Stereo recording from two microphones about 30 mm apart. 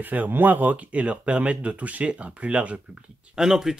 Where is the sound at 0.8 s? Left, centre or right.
Right.